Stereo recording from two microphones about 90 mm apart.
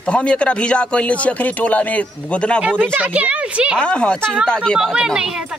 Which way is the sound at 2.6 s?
20° right (ahead or behind).